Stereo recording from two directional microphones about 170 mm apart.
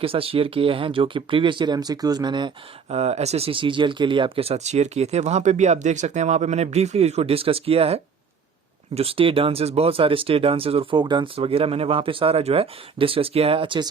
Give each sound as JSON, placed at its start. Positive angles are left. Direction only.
{"t": 0.0, "sound": "speech", "side_deg": -35}
{"t": 2.9, "sound": "speech", "side_deg": -40}